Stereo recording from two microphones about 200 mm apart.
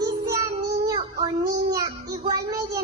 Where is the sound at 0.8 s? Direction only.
20° right (ahead or behind).